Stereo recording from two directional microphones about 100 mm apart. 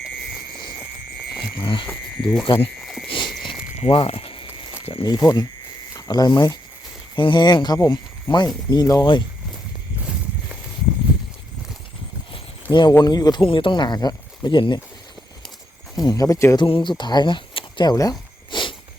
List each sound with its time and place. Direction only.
1.6 s speech: 55° left (ahead or behind)
1.9 s speech: 5° left (ahead or behind)
2.4 s speech: 60° left (ahead or behind)
2.8 s a sound: centre (ahead or behind)
3.1 s a sound: 55° left (ahead or behind)
3.8 s speech: 75° left (ahead or behind)
5.0 s speech: 40° left (ahead or behind)
10.1 s a sound: 10° right (ahead or behind)
12.9 s speech: 40° left (ahead or behind)
13.4 s speech: 60° left (ahead or behind)
16.0 s speech: 40° left (ahead or behind)
16.6 s speech: 55° left (ahead or behind)
17.9 s speech: 35° left (ahead or behind)
18.5 s a sound: 50° left (ahead or behind)